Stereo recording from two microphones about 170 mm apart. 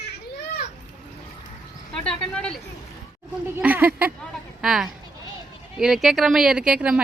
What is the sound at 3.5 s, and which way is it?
Speech, 10° right (ahead or behind).